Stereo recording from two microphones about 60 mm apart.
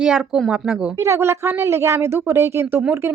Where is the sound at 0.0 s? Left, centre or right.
Centre.